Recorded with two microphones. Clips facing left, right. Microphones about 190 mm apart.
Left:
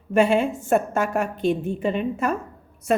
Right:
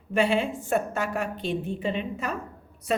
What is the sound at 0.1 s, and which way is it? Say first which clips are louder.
A woman's voice: left 5 dB; 45° left (ahead or behind).